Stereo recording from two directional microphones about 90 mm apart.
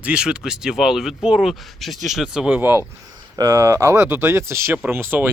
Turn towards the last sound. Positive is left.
turn(degrees=-25)  # may be behind; listen again after turning